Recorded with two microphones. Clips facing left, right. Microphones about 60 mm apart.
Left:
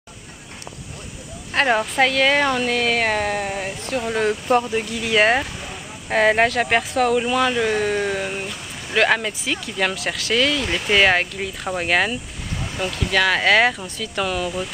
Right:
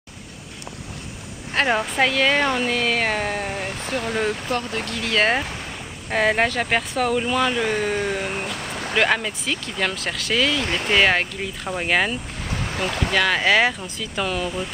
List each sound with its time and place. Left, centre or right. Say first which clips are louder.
1.5 s speech: left 2 dB; centre
8.6 s a sound: right 5 dB; right
8.9 s speech: left 2 dB; centre
12.7 s speech: right 1 dB; right
13.1 s speech: left 2 dB; centre